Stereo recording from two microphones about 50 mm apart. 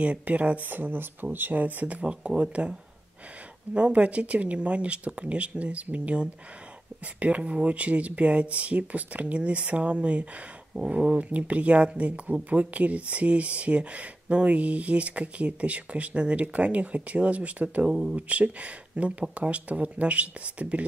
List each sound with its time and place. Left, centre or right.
0.0 s speech: right
3.7 s speech: right
7.2 s speech: right
17.8 s speech: centre
18.1 s speech: right